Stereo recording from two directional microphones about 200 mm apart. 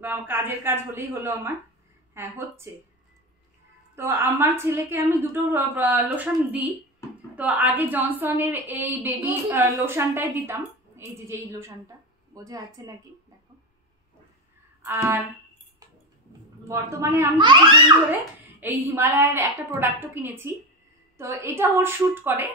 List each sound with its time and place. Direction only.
0.0 s a woman's voice: 10° right (ahead or behind)
3.9 s a woman's voice: 10° right (ahead or behind)
14.8 s a sound: 10° right (ahead or behind)
16.6 s a child's voice: 15° right (ahead or behind)
18.6 s a woman's voice: 10° right (ahead or behind)